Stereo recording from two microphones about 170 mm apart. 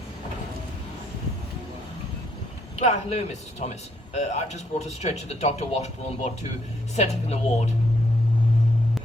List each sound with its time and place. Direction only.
2.7 s speech: 40° left (ahead or behind)